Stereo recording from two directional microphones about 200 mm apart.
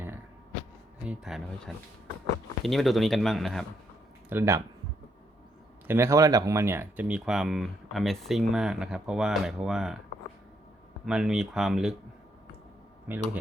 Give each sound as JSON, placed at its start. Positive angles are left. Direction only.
{"t": 1.0, "sound": "speech", "side_deg": 0}
{"t": 4.3, "sound": "speech", "side_deg": -15}
{"t": 5.9, "sound": "speech", "side_deg": -15}
{"t": 11.0, "sound": "speech", "side_deg": -5}
{"t": 13.1, "sound": "speech", "side_deg": -10}